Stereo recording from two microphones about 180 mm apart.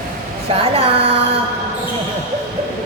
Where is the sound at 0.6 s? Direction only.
30° right (ahead or behind).